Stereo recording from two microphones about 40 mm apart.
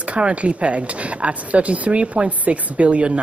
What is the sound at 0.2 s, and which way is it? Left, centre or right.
A man's voice, right.